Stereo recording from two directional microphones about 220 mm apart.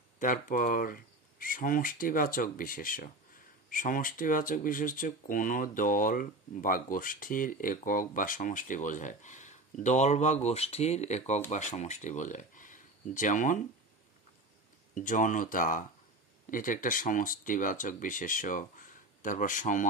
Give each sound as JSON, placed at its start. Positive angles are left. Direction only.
{"t": 0.2, "sound": "speech", "side_deg": 40}
{"t": 15.0, "sound": "speech", "side_deg": 35}